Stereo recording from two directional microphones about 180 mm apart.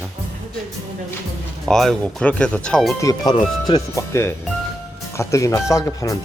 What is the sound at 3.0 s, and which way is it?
Speech, 20° left (ahead or behind).